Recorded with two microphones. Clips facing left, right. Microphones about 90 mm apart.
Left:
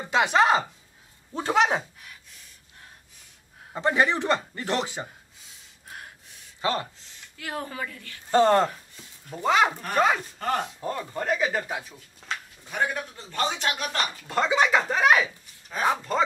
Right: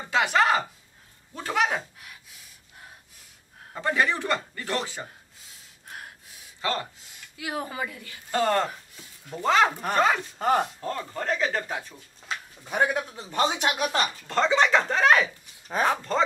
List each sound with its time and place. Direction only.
0.1 s a man's voice: 20° left (ahead or behind)
1.8 s gasp: 5° right (ahead or behind)
3.7 s a man's voice: 20° left (ahead or behind)
5.0 s gasp: centre (ahead or behind)
6.6 s a man's voice: 20° left (ahead or behind)
7.0 s speech: 10° right (ahead or behind)
8.3 s a man's voice: 25° left (ahead or behind)
8.6 s chopping: centre (ahead or behind)
9.9 s speech: 5° left (ahead or behind)
12.6 s a man's voice: 20° right (ahead or behind)
14.2 s speech: 5° left (ahead or behind)